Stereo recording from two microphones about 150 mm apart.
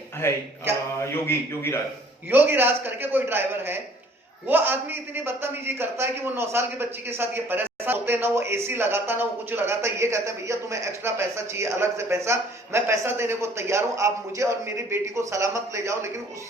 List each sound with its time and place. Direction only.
0.2 s a man's voice: 15° left (ahead or behind)
2.3 s a man's voice: 15° right (ahead or behind)